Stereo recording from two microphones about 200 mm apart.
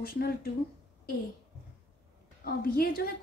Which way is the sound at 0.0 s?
50° left (ahead or behind).